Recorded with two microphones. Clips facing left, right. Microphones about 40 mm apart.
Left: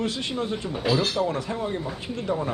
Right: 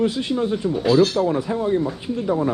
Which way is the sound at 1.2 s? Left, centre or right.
Centre.